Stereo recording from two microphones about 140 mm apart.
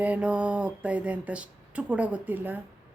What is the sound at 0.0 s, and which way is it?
A woman's voice, 10° right (ahead or behind).